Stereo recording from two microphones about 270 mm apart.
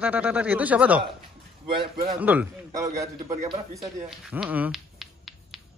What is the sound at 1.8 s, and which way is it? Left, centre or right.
Speech, right.